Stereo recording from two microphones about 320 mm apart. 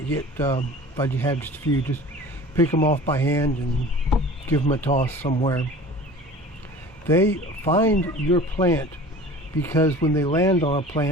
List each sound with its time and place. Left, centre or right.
0.1 s speech: centre
2.7 s speech: centre
3.1 s speech: centre
4.1 s a sound: centre
4.6 s speech: centre
7.1 s speech: centre